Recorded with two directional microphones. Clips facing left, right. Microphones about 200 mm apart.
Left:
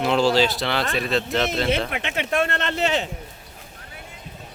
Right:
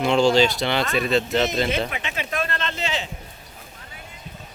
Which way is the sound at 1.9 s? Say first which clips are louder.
Left 4 dB; 60° left (ahead or behind).